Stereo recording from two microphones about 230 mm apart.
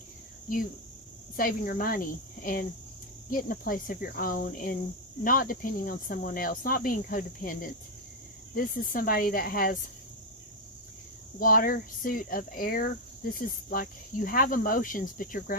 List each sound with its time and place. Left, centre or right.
1.4 s speech: left
11.3 s speech: left